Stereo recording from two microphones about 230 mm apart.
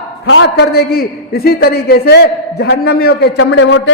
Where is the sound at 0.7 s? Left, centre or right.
Left.